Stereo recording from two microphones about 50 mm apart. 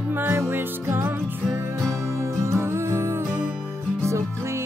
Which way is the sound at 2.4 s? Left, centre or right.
Right.